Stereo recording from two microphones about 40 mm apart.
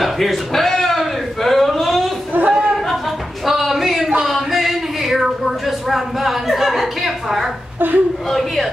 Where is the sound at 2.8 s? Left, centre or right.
Centre.